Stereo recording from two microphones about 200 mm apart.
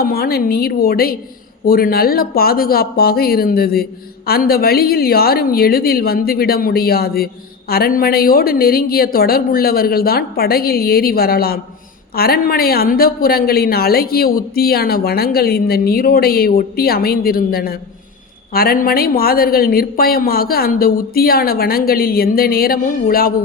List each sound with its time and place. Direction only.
0.0 s a woman's voice: 50° left (ahead or behind)